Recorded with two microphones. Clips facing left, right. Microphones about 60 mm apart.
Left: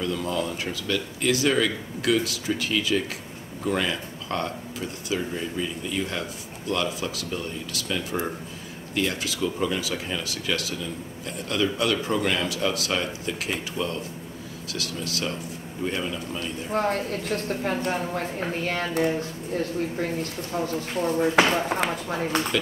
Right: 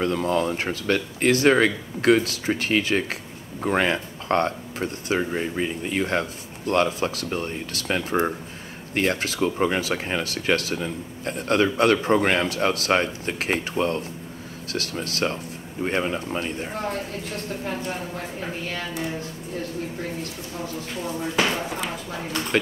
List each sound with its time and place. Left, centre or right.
0.0 s speech: right
16.7 s a woman's voice: left